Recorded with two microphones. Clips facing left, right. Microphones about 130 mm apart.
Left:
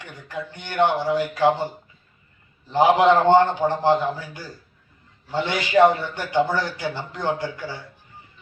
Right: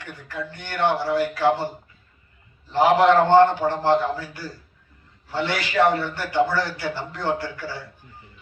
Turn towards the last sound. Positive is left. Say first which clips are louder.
# even
turn(degrees=15)  # may be behind; listen again after turning